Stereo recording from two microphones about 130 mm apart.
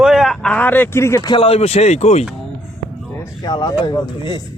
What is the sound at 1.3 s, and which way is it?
Speech, 45° left (ahead or behind).